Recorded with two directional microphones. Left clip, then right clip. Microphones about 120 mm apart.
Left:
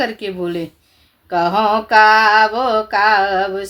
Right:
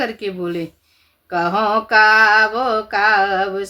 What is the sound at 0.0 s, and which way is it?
Speech, 20° left (ahead or behind).